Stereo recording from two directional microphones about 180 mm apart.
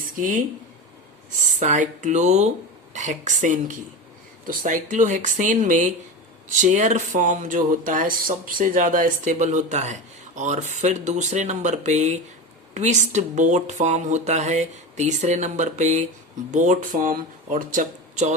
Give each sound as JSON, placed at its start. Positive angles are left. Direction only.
{"t": 0.2, "sound": "speech", "side_deg": -45}
{"t": 1.5, "sound": "speech", "side_deg": -45}